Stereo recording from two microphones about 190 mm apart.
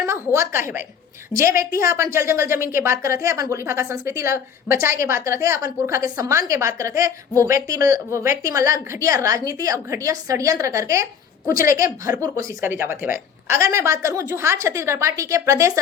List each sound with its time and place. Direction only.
0.0 s a woman's voice: 15° right (ahead or behind)